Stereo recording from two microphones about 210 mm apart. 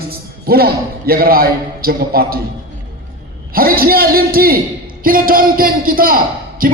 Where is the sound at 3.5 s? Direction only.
45° right (ahead or behind).